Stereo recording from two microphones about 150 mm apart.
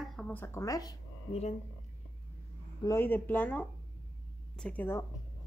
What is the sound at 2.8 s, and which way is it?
Speech, 15° left (ahead or behind).